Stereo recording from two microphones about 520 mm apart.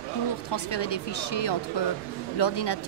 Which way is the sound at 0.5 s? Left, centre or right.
Left.